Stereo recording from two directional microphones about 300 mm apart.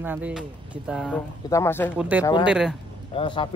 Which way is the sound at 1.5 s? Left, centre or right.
Centre.